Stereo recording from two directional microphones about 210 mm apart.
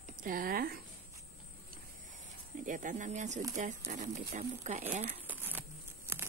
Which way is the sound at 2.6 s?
40° right (ahead or behind).